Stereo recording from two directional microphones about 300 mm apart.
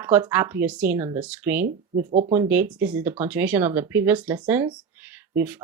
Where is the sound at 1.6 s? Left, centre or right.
Right.